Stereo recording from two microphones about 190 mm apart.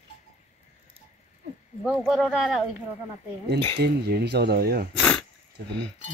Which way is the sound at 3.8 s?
60° right (ahead or behind).